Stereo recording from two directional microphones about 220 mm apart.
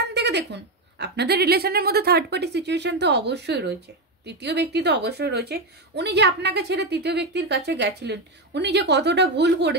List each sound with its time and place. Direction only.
0.0 s a woman's voice: 50° right (ahead or behind)